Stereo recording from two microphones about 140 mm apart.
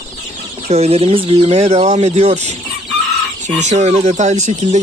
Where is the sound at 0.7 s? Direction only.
50° right (ahead or behind).